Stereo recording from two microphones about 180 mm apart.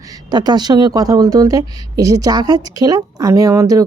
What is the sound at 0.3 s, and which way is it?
A woman's voice, 20° right (ahead or behind).